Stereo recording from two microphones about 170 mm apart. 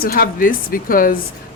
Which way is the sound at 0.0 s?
60° left (ahead or behind).